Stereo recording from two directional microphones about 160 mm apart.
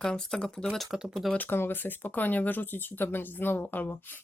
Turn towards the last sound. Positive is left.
turn(degrees=10)  # may be behind; listen again after turning